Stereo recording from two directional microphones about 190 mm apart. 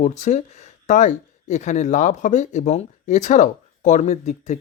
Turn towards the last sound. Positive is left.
turn(degrees=35)  # may be behind; listen again after turning